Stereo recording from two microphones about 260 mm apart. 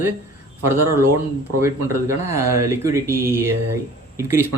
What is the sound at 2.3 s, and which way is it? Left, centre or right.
Speech, centre.